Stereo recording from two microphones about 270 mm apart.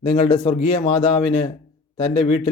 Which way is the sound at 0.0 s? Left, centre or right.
Centre.